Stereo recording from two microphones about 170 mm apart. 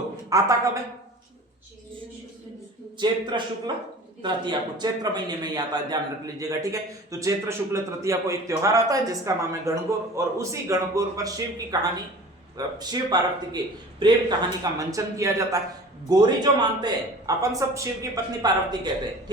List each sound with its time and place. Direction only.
0.3 s a man's voice: 20° right (ahead or behind)
3.0 s a man's voice: 25° right (ahead or behind)